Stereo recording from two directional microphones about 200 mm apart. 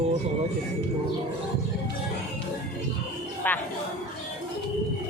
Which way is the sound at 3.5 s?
10° left (ahead or behind).